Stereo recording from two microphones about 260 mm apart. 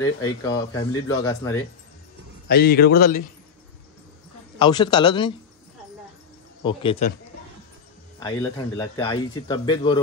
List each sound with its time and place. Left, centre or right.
0.0 s speech: centre
2.4 s a man's voice: left
4.6 s speech: centre
6.6 s speech: centre
8.2 s speech: centre